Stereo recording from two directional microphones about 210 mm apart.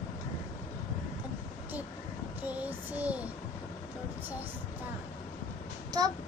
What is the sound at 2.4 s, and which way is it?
Child singing, 10° right (ahead or behind).